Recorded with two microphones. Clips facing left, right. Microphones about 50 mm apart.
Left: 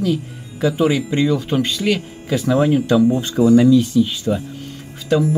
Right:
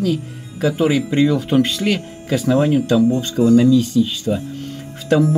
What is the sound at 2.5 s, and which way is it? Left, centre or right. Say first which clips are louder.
Speech: left 1 dB; centre.